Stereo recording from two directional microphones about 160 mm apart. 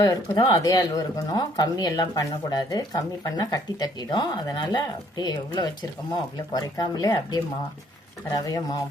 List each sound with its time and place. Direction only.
0.0 s speech: 25° left (ahead or behind)